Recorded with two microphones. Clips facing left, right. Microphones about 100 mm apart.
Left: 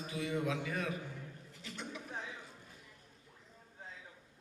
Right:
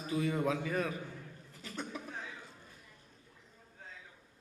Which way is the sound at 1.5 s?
40° right (ahead or behind).